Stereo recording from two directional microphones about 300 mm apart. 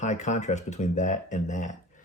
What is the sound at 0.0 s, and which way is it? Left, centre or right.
A man's voice, left.